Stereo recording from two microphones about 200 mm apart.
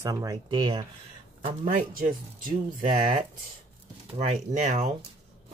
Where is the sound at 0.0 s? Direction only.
15° right (ahead or behind).